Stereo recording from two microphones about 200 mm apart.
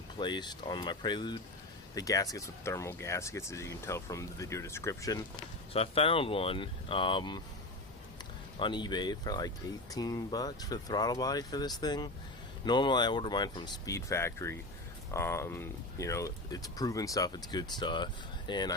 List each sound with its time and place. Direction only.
0.2 s speech: 20° left (ahead or behind)
5.7 s speech: 30° left (ahead or behind)
8.5 s speech: 25° left (ahead or behind)